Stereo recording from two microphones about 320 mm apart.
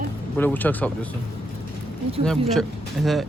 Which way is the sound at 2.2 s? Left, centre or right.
Centre.